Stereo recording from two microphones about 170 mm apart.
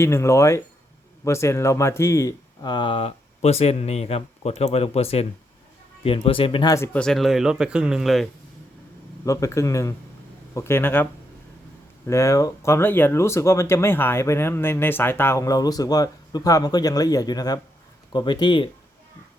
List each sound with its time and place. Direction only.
0.0 s speech: 15° left (ahead or behind)
7.0 s speech: centre (ahead or behind)
9.2 s speech: 20° left (ahead or behind)